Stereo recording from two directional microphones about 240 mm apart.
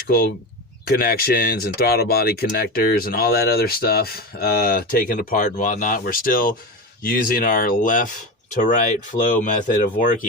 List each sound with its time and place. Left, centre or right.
0.9 s speech: left